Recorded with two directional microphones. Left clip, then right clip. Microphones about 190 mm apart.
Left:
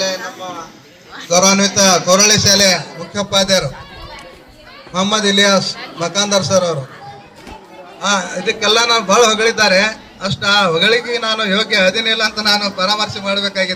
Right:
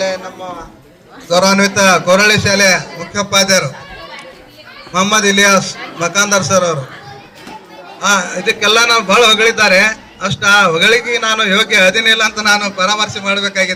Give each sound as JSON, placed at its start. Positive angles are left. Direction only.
{"t": 1.4, "sound": "a man's voice", "side_deg": 0}
{"t": 1.7, "sound": "a man's voice", "side_deg": -20}
{"t": 2.6, "sound": "a man's voice", "side_deg": 0}
{"t": 3.0, "sound": "a man's voice", "side_deg": 10}
{"t": 4.9, "sound": "a man's voice", "side_deg": 10}
{"t": 8.0, "sound": "a man's voice", "side_deg": 10}